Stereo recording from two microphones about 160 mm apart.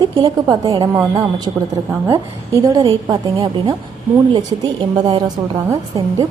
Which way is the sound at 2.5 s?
20° right (ahead or behind).